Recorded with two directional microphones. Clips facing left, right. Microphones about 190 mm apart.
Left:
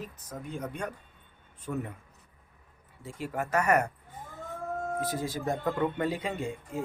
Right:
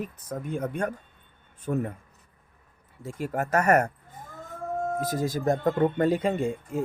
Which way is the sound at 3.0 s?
45° right (ahead or behind).